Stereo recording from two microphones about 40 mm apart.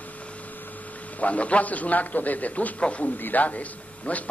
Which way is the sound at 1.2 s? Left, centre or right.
Left.